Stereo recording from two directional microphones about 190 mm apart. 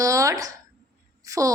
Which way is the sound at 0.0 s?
15° right (ahead or behind).